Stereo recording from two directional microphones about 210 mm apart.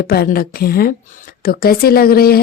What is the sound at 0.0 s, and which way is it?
Speech, 45° left (ahead or behind).